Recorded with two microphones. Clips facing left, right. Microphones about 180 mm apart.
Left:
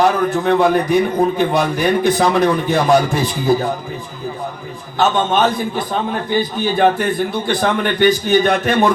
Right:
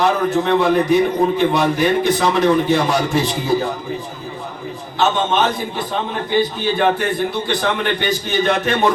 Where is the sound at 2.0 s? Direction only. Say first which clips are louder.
Left 1 dB; 50° left (ahead or behind).